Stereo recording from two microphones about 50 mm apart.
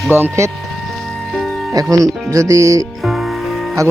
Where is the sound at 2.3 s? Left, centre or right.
Right.